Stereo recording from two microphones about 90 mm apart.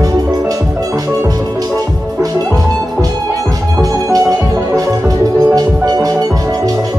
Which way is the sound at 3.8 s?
40° right (ahead or behind).